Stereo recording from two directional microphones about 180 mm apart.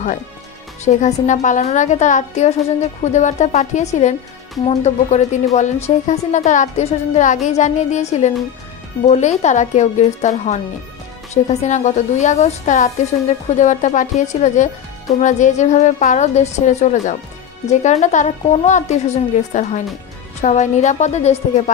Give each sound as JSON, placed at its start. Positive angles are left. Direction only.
{"t": 0.8, "sound": "a woman's voice", "side_deg": 40}